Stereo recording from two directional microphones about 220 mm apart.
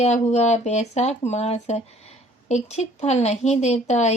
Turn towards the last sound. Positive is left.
turn(degrees=30)  # may be behind; listen again after turning